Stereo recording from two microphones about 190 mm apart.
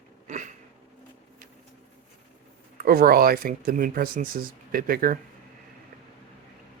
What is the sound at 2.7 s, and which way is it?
Speech, 50° right (ahead or behind).